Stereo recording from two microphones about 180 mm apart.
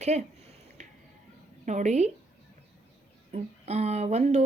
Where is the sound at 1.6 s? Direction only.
40° right (ahead or behind).